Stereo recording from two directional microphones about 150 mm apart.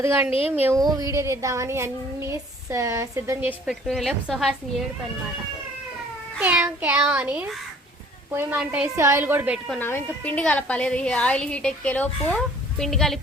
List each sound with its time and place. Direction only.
0.3 s speech: 40° left (ahead or behind)
0.6 s a child's voice: 20° right (ahead or behind)
3.7 s a woman's voice: centre (ahead or behind)
6.4 s a child's voice: 10° right (ahead or behind)
9.6 s a woman's voice: 10° left (ahead or behind)